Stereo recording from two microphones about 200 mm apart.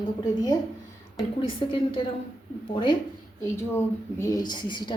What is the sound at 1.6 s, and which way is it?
Speech, 25° left (ahead or behind).